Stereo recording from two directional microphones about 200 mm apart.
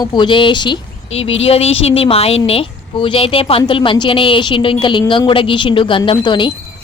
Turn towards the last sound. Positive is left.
turn(degrees=25)  # may be behind; listen again after turning